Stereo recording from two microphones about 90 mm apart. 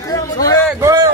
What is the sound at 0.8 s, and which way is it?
Speech, 40° right (ahead or behind).